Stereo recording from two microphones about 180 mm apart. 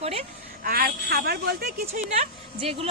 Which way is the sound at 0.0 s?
35° right (ahead or behind).